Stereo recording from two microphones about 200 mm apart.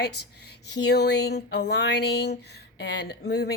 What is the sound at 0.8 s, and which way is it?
A woman's voice, 55° left (ahead or behind).